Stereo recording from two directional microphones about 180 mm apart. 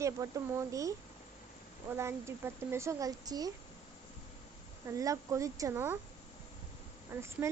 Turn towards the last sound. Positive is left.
turn(degrees=-15)  # may be behind; listen again after turning